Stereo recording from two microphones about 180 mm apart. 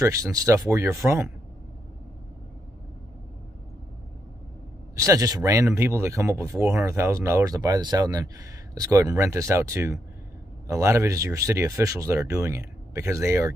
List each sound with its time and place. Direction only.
0.0 s speech: 20° right (ahead or behind)
4.9 s speech: 20° right (ahead or behind)